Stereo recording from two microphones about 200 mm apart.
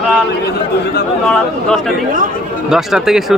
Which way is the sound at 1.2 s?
5° left (ahead or behind).